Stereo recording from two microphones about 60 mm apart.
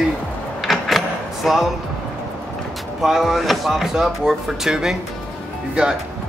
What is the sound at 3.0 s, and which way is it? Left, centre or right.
Speech, centre.